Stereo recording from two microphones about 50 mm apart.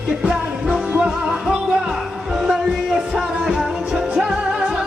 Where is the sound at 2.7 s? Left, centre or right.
Centre.